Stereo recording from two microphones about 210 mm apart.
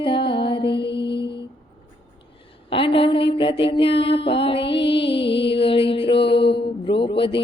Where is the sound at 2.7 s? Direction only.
25° left (ahead or behind).